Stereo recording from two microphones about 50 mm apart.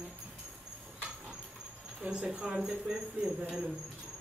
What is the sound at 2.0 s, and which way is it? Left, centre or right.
Speech, centre.